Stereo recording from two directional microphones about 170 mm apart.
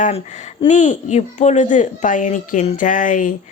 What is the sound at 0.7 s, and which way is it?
A woman's voice, 45° left (ahead or behind).